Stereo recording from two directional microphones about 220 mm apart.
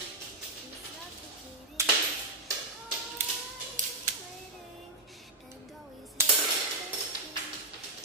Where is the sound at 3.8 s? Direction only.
35° right (ahead or behind).